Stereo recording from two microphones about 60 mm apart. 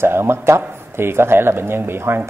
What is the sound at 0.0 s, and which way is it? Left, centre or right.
Speech, right.